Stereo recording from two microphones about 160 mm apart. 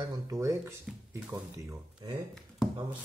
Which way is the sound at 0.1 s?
20° right (ahead or behind).